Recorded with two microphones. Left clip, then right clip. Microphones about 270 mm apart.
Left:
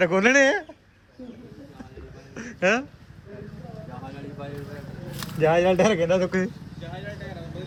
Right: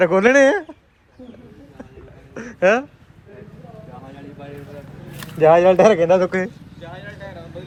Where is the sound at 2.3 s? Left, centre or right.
Centre.